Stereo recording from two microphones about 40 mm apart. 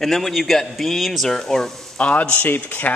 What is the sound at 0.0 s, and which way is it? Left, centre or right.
Speech, centre.